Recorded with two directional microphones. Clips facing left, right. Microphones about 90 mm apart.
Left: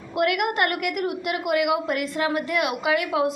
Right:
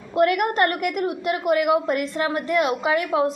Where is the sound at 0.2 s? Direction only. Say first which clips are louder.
Right 3 dB; 30° right (ahead or behind).